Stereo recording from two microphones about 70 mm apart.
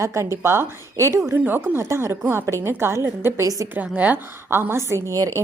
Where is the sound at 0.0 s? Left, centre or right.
Right.